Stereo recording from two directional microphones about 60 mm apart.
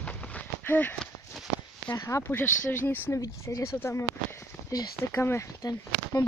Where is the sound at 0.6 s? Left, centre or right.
Left.